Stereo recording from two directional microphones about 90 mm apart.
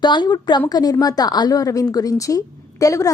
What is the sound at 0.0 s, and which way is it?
A woman's voice, 55° left (ahead or behind).